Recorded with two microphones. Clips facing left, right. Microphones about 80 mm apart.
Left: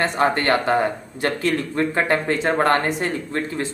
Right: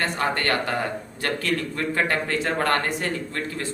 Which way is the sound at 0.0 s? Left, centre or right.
Left.